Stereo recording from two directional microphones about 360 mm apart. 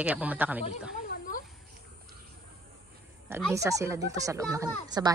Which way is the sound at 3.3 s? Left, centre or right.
Centre.